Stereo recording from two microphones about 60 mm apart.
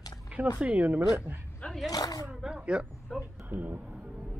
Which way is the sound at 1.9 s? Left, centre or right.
Left.